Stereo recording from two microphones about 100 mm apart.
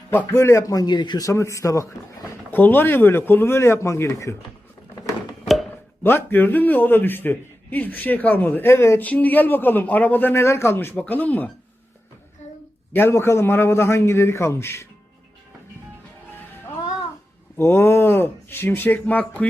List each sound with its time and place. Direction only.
0.3 s speech: 30° left (ahead or behind); by 1.3 s 45° left (ahead or behind)
1.3 s speech: 30° left (ahead or behind)
2.3 s a man's voice: 20° left (ahead or behind)
6.0 s a man's voice: 20° left (ahead or behind)
9.0 s a man's voice: 15° left (ahead or behind)
12.9 s a man's voice: 20° left (ahead or behind)
17.6 s a man's voice: 25° left (ahead or behind)